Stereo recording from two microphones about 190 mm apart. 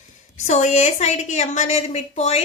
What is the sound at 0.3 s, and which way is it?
A woman's voice, 40° left (ahead or behind).